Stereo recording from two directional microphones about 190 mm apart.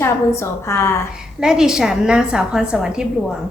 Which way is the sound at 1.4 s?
5° right (ahead or behind).